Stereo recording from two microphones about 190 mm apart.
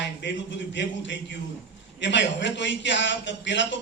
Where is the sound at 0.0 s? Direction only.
70° left (ahead or behind).